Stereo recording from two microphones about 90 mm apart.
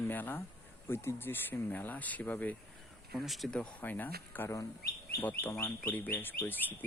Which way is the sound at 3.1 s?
Centre (ahead or behind).